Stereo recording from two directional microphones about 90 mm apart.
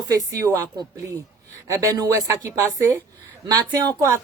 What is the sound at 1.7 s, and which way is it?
Speech, 35° right (ahead or behind).